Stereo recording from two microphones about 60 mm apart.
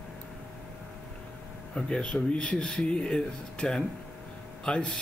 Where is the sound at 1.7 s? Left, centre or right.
Centre.